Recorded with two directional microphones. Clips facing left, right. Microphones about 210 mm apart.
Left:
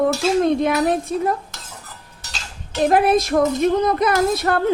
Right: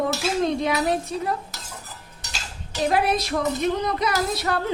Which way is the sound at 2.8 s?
50° left (ahead or behind).